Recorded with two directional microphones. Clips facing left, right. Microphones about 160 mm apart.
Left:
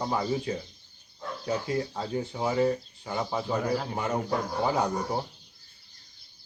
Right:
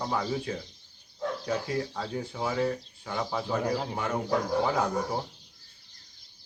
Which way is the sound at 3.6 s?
15° right (ahead or behind).